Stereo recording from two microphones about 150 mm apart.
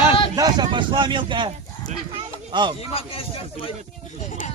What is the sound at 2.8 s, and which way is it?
Speech, 40° left (ahead or behind).